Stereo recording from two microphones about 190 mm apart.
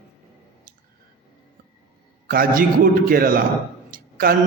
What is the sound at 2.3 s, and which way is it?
A man's voice, 50° right (ahead or behind).